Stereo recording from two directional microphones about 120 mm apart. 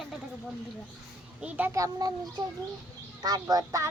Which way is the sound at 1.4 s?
15° right (ahead or behind).